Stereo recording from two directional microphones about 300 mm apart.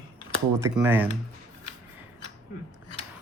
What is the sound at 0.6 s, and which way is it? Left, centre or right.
Speech, centre.